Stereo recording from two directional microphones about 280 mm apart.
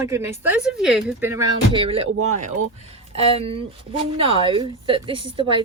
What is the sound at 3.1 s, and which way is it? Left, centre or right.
A woman's voice, centre.